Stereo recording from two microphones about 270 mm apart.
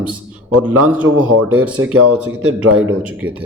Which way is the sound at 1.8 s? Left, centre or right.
Right.